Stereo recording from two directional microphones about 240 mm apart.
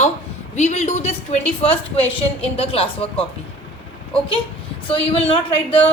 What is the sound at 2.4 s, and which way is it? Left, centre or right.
Speech, left.